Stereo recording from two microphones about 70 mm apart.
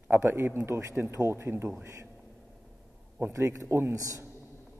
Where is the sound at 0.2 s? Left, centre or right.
Right.